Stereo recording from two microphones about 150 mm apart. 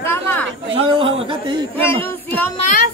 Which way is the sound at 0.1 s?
15° left (ahead or behind).